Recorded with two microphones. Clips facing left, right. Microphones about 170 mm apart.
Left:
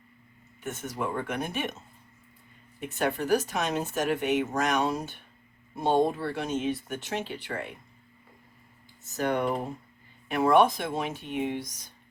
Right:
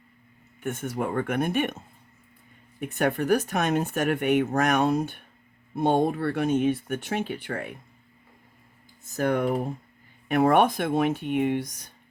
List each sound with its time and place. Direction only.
0.6 s speech: 55° right (ahead or behind)
2.8 s speech: 55° right (ahead or behind)
9.1 s speech: 50° right (ahead or behind)